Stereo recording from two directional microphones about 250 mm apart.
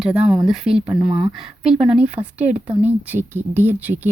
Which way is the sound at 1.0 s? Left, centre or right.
Centre.